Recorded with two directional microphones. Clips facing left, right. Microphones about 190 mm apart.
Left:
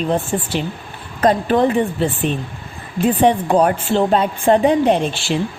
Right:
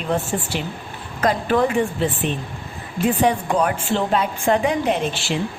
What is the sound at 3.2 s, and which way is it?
A woman's voice, 35° left (ahead or behind).